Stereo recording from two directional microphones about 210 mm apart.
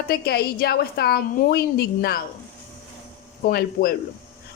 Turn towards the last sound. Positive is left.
turn(degrees=45)  # may be behind; listen again after turning